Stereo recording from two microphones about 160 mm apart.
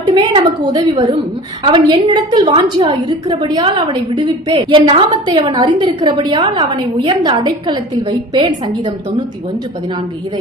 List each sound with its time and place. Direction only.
0.1 s a woman's voice: 30° right (ahead or behind)